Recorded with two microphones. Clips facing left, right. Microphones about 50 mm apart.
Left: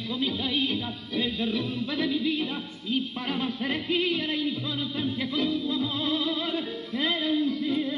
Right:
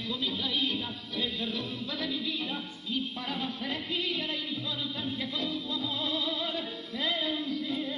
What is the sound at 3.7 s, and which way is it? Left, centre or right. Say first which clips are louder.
Music: left 8 dB; left.